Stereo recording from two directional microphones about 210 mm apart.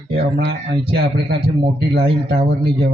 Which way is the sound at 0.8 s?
50° right (ahead or behind).